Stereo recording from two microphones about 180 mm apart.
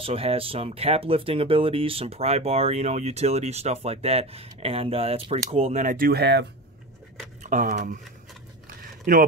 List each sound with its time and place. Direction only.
0.0 s speech: 30° right (ahead or behind); by 6.4 s 65° right (ahead or behind)
7.4 s speech: 45° right (ahead or behind)
8.6 s biting: 50° right (ahead or behind)